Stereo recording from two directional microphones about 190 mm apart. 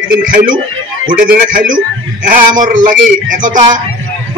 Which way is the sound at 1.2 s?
45° right (ahead or behind).